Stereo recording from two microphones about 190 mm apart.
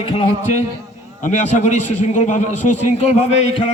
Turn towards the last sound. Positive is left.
turn(degrees=30)  # may be behind; listen again after turning